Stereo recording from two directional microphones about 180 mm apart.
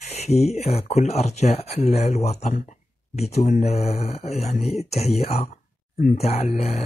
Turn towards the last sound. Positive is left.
turn(degrees=40)  # may be behind; listen again after turning